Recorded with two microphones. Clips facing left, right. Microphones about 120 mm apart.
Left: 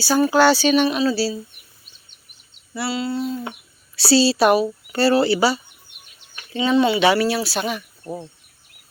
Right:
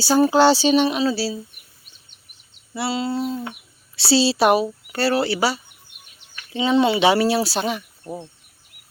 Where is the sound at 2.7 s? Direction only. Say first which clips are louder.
Right 1 dB; 25° right (ahead or behind).